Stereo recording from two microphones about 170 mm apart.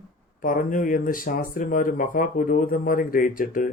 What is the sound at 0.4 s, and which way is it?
Speech, 55° left (ahead or behind).